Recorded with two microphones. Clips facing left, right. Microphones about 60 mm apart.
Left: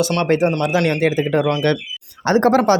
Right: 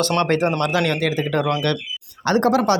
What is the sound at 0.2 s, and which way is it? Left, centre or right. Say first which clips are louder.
Speech: left 2 dB; centre.